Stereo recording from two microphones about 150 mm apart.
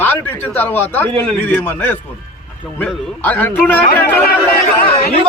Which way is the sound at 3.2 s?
10° left (ahead or behind).